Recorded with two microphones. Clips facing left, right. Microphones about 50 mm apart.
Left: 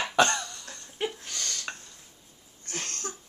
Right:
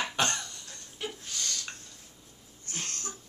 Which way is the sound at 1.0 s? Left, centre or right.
Left.